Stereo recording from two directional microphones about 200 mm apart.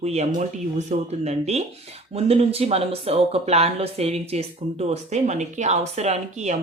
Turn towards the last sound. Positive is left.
turn(degrees=-35)  # may be behind; listen again after turning